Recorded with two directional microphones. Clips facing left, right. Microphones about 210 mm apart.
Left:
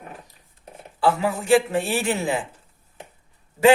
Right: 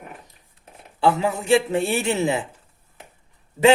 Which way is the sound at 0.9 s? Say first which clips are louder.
Right 1 dB; 20° right (ahead or behind).